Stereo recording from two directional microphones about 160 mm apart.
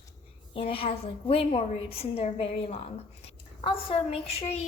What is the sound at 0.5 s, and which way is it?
A woman's voice, 35° left (ahead or behind).